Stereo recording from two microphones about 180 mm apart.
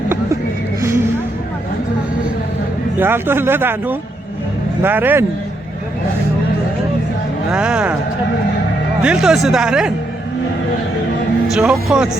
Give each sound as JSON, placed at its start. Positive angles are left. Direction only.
{"t": 0.8, "sound": "music", "side_deg": -15}
{"t": 3.0, "sound": "speech", "side_deg": -10}
{"t": 7.5, "sound": "speech", "side_deg": -5}
{"t": 9.0, "sound": "speech", "side_deg": -5}
{"t": 11.4, "sound": "speech", "side_deg": -5}